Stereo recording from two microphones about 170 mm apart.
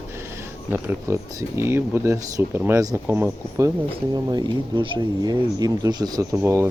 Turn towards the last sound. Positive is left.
turn(degrees=-15)  # may be behind; listen again after turning